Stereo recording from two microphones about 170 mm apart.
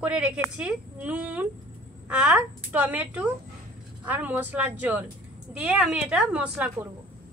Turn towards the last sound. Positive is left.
turn(degrees=-5)  # may be behind; listen again after turning